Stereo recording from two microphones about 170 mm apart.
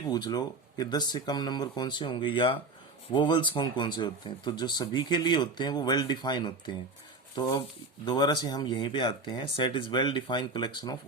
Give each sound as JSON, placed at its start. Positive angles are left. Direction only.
{"t": 0.1, "sound": "speech", "side_deg": 25}